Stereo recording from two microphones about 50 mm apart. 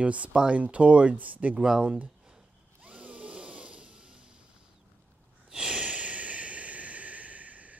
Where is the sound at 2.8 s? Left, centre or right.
Right.